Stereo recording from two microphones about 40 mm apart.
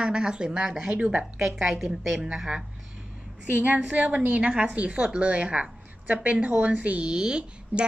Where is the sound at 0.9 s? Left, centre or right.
Right.